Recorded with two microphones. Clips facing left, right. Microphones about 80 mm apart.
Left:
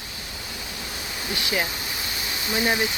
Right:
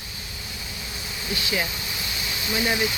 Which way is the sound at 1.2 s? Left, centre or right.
Left.